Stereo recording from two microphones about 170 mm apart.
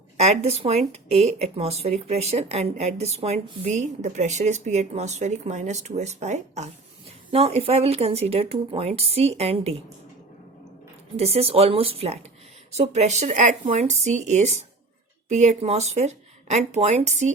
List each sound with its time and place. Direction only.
0.2 s speech: 40° right (ahead or behind)
11.2 s speech: 35° right (ahead or behind)